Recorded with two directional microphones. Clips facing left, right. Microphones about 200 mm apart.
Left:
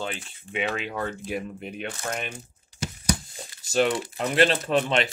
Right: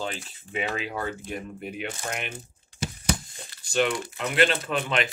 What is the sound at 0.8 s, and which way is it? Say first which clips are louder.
Speech: left 1 dB; 5° right (ahead or behind).